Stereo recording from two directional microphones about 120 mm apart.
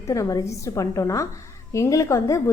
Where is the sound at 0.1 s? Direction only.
30° left (ahead or behind).